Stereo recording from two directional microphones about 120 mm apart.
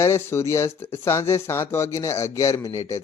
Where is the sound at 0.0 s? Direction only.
20° left (ahead or behind).